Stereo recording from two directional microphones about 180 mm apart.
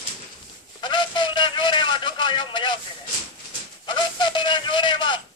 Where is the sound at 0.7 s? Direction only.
25° left (ahead or behind).